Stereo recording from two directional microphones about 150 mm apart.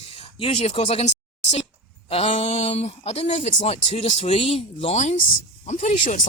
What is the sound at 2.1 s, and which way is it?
Speech, 45° left (ahead or behind).